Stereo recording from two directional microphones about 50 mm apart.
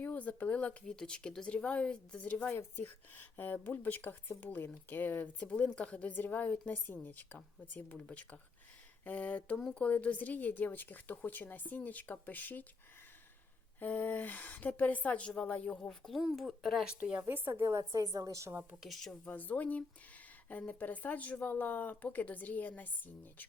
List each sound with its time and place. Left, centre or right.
0.0 s speech: left
2.6 s speech: left
7.9 s speech: left
13.7 s speech: left
15.9 s speech: centre
17.0 s speech: right
17.2 s a woman's voice: right
17.5 s a woman's voice: right
19.2 s speech: left